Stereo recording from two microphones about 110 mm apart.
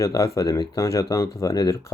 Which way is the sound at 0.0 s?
30° left (ahead or behind).